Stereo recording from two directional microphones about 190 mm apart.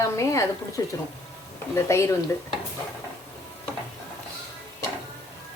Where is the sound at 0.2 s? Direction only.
15° left (ahead or behind).